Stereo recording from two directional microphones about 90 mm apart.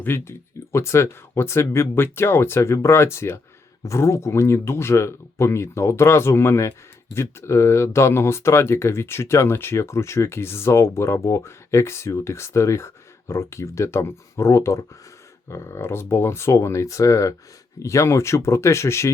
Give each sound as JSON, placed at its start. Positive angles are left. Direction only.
{"t": 0.0, "sound": "speech", "side_deg": 30}